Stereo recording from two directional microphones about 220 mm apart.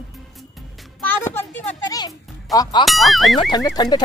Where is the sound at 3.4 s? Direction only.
20° left (ahead or behind).